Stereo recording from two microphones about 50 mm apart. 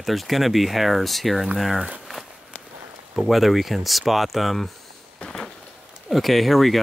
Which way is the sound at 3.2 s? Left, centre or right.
Centre.